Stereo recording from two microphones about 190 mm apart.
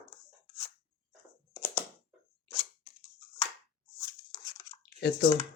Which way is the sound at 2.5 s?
30° left (ahead or behind).